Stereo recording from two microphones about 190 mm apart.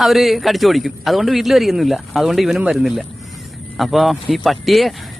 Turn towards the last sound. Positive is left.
turn(degrees=0)  # may be behind; listen again after turning